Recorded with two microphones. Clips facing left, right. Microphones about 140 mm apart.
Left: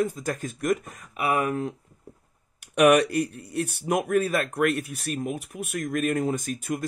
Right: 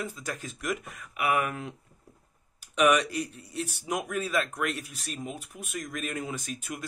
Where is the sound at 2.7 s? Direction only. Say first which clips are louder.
Left 6 dB; 60° left (ahead or behind).